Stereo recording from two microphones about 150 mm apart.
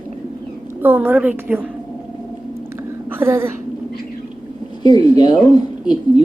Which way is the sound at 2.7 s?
15° right (ahead or behind).